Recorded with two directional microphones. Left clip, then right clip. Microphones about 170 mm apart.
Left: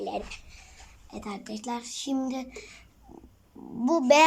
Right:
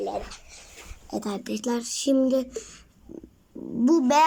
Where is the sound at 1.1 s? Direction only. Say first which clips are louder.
Right 7 dB; 30° right (ahead or behind).